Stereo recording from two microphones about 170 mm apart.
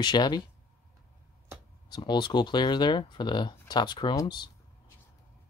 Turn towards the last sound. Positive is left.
turn(degrees=20)  # may be behind; listen again after turning